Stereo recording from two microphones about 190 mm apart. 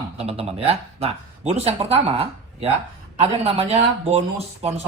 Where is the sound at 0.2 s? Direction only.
30° right (ahead or behind).